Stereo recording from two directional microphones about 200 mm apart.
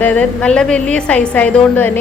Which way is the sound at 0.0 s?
5° left (ahead or behind).